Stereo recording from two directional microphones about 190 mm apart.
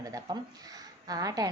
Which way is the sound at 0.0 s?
20° right (ahead or behind).